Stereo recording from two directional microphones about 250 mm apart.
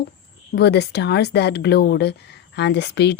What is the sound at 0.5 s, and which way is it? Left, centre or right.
Speech, left.